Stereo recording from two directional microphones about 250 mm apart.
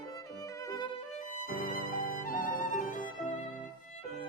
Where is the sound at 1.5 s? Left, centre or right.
Left.